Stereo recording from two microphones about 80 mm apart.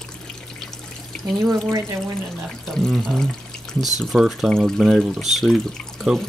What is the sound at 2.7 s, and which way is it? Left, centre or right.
Speech, centre.